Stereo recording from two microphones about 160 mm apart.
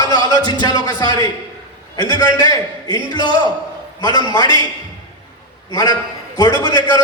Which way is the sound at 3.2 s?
30° right (ahead or behind).